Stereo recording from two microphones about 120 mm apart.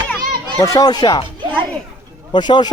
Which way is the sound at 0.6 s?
30° left (ahead or behind).